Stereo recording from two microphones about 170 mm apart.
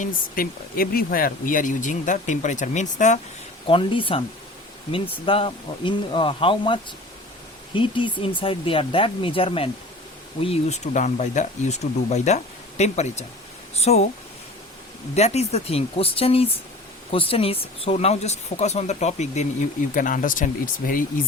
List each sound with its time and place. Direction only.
0.0 s speech: 60° left (ahead or behind)
3.7 s speech: 30° left (ahead or behind)
15.1 s speech: 40° left (ahead or behind)